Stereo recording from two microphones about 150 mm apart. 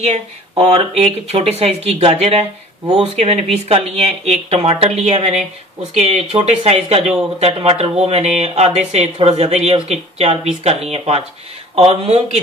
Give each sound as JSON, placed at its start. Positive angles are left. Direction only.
{"t": 0.0, "sound": "speech", "side_deg": -45}